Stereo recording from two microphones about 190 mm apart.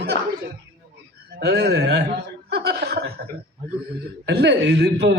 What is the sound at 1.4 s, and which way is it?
Speech, 60° right (ahead or behind).